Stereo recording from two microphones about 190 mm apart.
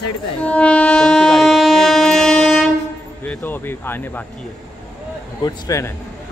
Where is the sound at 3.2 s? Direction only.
10° left (ahead or behind).